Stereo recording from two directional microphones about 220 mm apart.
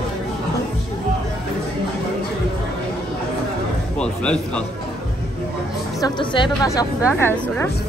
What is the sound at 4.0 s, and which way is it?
Speech, 5° left (ahead or behind).